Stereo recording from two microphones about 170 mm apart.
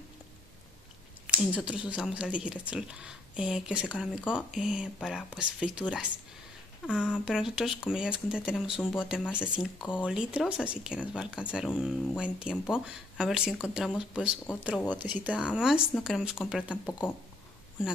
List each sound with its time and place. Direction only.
1.2 s speech: 5° right (ahead or behind)